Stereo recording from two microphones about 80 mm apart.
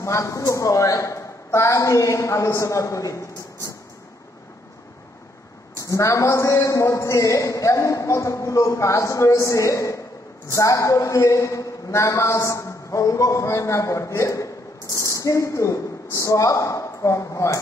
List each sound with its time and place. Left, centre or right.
0.0 s a man's voice: left
5.8 s a man's voice: left